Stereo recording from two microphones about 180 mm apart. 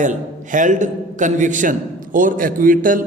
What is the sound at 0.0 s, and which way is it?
A man's voice, 45° right (ahead or behind).